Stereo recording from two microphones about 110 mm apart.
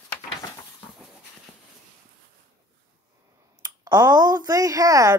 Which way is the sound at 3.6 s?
35° right (ahead or behind).